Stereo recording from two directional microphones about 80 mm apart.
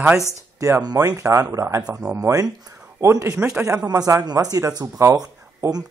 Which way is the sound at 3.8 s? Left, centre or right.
Right.